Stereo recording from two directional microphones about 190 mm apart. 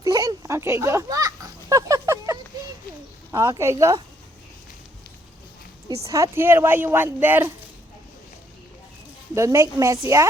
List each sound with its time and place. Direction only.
0.0 s a sound: 20° right (ahead or behind)
3.3 s a woman's voice: 15° right (ahead or behind)
6.1 s a woman's voice: 15° right (ahead or behind)
9.3 s a woman's voice: 15° right (ahead or behind)